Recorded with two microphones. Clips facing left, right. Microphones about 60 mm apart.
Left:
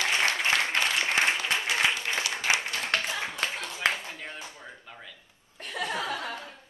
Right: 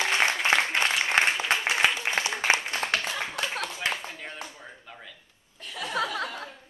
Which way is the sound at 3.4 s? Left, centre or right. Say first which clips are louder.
Even; right.